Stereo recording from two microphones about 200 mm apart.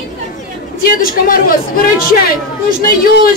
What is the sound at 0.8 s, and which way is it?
Speech, 45° left (ahead or behind).